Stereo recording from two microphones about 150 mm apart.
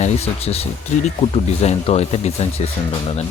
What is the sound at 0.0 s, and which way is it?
Speech, 45° left (ahead or behind).